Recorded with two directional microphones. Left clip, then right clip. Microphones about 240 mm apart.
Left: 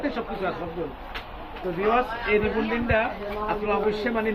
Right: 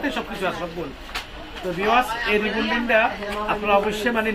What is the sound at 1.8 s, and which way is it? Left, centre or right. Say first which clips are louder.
Speech: right 4 dB; centre.